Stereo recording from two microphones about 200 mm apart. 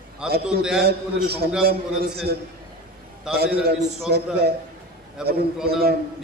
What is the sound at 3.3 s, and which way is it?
A man's voice, 55° right (ahead or behind).